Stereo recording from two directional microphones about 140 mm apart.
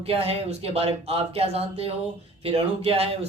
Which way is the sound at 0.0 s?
45° right (ahead or behind).